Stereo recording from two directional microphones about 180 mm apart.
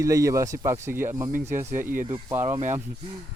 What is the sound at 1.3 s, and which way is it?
Speech, 50° right (ahead or behind).